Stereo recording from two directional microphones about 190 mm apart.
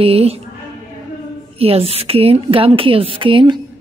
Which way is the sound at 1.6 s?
30° right (ahead or behind).